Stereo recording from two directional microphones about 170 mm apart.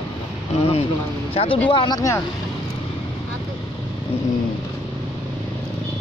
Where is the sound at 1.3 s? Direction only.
35° left (ahead or behind); by 2.2 s 20° left (ahead or behind).